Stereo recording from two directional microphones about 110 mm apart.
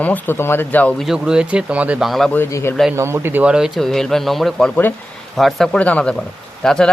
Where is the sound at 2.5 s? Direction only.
30° left (ahead or behind).